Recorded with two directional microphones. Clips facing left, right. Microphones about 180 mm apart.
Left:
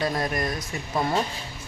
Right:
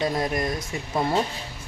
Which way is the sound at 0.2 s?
20° right (ahead or behind).